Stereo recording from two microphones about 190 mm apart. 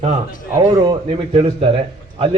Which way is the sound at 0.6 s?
25° right (ahead or behind).